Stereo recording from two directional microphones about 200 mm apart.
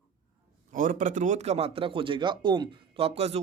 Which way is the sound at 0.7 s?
40° right (ahead or behind).